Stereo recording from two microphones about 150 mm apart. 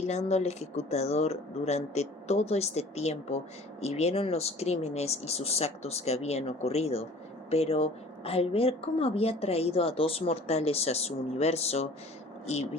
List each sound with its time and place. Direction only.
0.1 s a woman's voice: 45° left (ahead or behind)